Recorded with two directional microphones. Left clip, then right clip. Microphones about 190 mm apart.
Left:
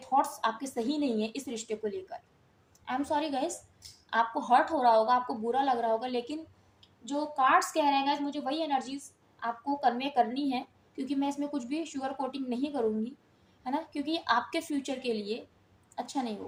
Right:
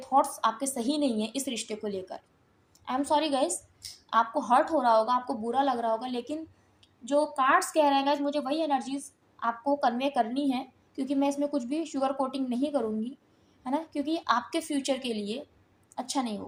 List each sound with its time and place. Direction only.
0.0 s a woman's voice: 30° right (ahead or behind)